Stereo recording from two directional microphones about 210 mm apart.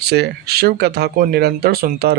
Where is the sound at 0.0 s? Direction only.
50° right (ahead or behind).